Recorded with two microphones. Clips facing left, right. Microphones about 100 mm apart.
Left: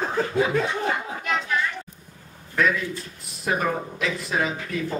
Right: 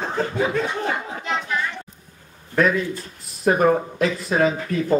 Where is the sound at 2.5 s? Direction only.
40° right (ahead or behind).